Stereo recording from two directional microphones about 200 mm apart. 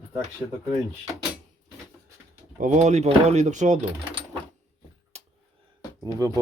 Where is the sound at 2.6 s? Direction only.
35° right (ahead or behind).